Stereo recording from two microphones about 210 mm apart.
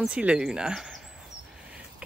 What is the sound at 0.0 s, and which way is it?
Speech, 5° right (ahead or behind).